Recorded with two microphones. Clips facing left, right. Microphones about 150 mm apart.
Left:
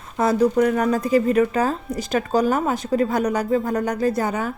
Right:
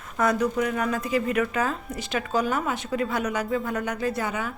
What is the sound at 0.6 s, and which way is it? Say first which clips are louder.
A woman's voice: left 7 dB; 40° left (ahead or behind).